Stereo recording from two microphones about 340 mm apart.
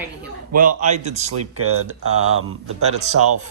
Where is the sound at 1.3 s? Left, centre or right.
Right.